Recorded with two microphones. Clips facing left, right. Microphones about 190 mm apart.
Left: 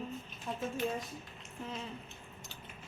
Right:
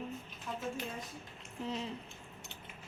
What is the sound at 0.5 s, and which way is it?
Speech, 30° left (ahead or behind).